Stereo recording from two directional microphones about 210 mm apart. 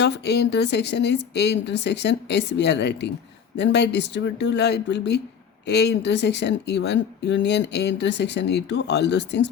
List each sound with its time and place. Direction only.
0.0 s speech: 55° left (ahead or behind)